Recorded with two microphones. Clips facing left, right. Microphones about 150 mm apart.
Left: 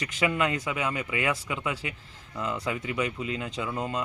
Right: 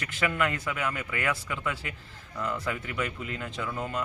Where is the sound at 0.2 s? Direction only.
20° left (ahead or behind).